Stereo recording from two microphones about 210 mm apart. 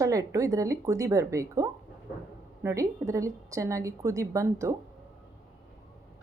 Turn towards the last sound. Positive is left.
turn(degrees=-15)  # may be behind; listen again after turning